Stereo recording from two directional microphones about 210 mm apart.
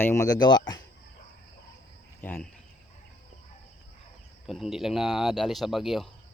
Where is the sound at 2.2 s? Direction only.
5° left (ahead or behind).